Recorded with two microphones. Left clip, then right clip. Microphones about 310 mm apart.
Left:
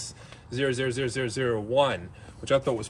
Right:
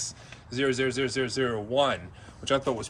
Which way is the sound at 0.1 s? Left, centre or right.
Centre.